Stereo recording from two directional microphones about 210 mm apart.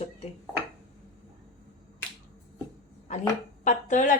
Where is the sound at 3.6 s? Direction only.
35° left (ahead or behind).